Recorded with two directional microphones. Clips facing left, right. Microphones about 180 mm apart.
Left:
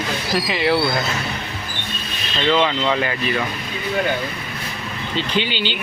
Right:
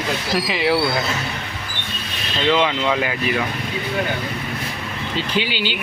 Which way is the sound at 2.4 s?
5° right (ahead or behind).